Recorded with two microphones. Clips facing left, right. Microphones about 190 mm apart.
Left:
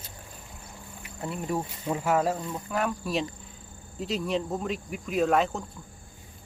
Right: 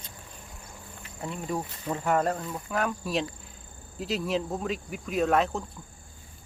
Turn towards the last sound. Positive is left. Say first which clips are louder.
# left 1 dB
turn(degrees=0)  # may be behind; listen again after turning